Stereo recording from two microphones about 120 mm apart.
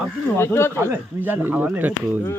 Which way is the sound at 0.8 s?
15° right (ahead or behind).